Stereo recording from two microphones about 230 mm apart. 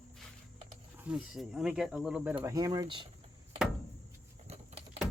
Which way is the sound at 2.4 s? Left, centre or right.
Centre.